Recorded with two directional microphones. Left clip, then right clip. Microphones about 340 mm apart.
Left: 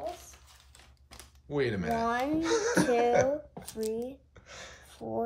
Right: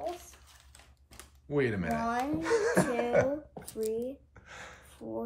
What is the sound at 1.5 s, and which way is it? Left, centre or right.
Speech, centre.